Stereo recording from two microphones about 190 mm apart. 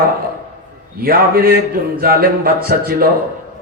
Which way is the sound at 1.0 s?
50° right (ahead or behind).